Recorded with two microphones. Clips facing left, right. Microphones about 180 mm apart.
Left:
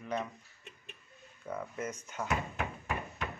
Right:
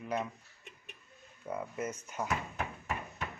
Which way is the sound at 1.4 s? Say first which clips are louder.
Right 1 dB; 10° right (ahead or behind).